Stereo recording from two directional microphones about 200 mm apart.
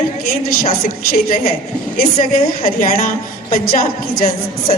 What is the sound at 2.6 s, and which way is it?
A woman's voice, 40° left (ahead or behind).